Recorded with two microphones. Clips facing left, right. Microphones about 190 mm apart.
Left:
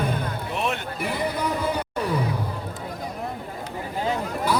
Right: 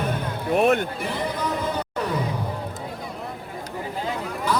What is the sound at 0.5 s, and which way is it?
Music, 50° right (ahead or behind).